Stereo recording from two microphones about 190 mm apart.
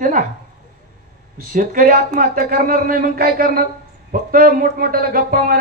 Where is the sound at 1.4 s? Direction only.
45° right (ahead or behind).